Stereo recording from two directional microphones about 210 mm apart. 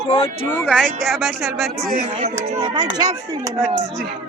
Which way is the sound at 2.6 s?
20° right (ahead or behind).